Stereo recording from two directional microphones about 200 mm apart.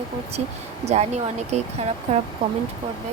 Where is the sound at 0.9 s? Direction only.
35° right (ahead or behind).